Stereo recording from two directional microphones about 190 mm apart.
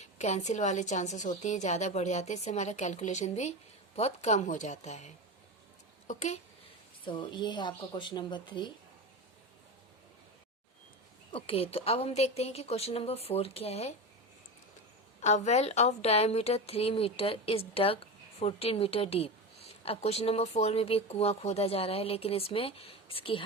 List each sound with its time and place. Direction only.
0.0 s a woman's voice: 35° left (ahead or behind)
7.0 s speech: 25° left (ahead or behind)
11.3 s a woman's voice: 30° left (ahead or behind)
15.2 s a woman's voice: 35° left (ahead or behind)